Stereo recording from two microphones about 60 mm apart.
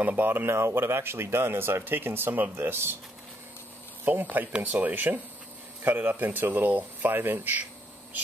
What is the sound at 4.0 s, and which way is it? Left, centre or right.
Speech, right.